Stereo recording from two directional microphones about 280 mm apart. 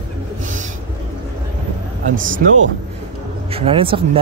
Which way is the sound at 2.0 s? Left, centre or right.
Right.